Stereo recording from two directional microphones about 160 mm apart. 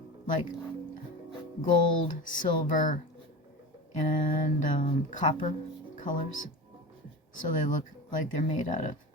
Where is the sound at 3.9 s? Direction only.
55° left (ahead or behind).